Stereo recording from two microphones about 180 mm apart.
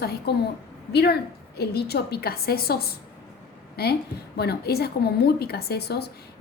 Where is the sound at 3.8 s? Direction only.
60° left (ahead or behind).